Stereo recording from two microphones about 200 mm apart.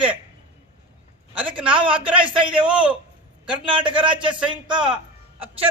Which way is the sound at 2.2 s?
25° right (ahead or behind).